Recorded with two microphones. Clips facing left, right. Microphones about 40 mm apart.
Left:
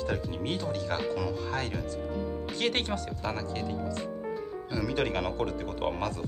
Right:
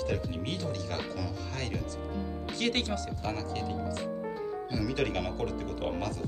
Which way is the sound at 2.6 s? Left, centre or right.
Centre.